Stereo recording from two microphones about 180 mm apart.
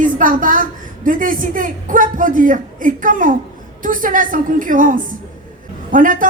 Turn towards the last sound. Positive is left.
turn(degrees=-50)  # may be behind; listen again after turning